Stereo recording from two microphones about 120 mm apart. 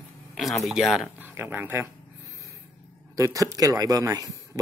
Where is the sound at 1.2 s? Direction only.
15° right (ahead or behind).